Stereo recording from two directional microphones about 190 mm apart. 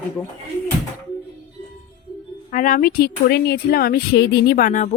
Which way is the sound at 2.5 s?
45° left (ahead or behind).